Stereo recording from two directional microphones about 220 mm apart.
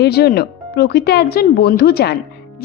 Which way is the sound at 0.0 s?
45° left (ahead or behind).